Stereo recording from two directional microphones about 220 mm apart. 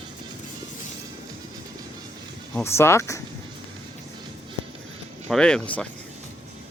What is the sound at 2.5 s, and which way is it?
Speech, 10° left (ahead or behind).